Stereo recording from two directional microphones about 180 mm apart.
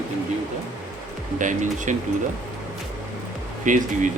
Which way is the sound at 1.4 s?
45° right (ahead or behind).